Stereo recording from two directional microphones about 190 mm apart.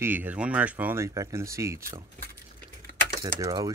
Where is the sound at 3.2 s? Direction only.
20° right (ahead or behind).